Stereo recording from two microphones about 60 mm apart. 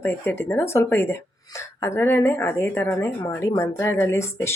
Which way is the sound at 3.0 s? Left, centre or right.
Left.